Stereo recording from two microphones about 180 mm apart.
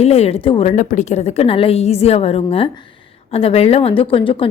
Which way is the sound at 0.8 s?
45° left (ahead or behind).